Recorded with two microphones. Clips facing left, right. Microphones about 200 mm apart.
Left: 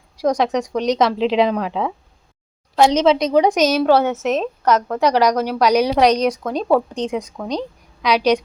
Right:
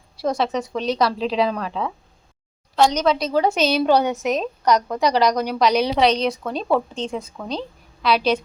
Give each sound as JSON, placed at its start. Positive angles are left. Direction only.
{"t": 0.2, "sound": "speech", "side_deg": 15}